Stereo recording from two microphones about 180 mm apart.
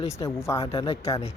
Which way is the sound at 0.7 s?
35° left (ahead or behind).